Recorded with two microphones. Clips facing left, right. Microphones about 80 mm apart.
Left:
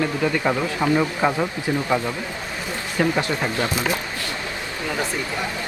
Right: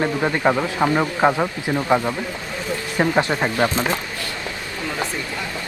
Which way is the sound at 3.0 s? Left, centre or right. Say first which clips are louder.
Right 2 dB; right.